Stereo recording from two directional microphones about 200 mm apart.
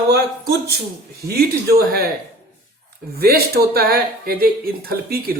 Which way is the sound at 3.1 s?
50° right (ahead or behind).